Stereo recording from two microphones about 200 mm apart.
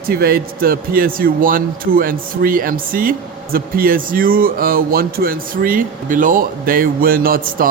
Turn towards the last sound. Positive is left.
turn(degrees=-45)  # may be behind; listen again after turning